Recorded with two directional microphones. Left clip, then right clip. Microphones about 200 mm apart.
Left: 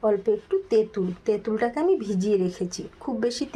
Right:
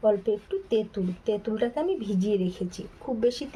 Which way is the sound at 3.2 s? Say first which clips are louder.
Right 1 dB; 25° left (ahead or behind).